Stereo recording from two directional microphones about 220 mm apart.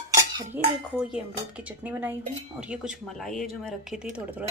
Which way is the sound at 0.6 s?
10° right (ahead or behind).